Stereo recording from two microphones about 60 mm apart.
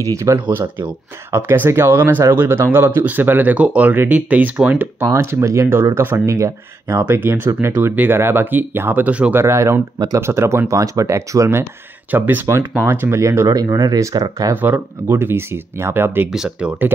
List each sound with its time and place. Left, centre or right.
0.0 s speech: right
0.5 s speech: right
5.0 s speech: right
7.2 s speech: right
7.8 s speech: right
9.0 s speech: right
9.3 s speech: right
10.7 s speech: right
12.1 s speech: right
12.4 s speech: right
13.5 s speech: right
14.5 s speech: right
15.0 s speech: right
16.3 s speech: centre